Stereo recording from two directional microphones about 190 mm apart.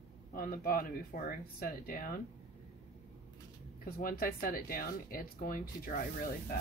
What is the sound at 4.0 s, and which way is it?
Speech, 50° left (ahead or behind).